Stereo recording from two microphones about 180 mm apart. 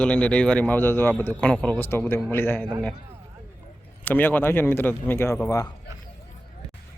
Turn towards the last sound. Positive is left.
turn(degrees=15)  # may be behind; listen again after turning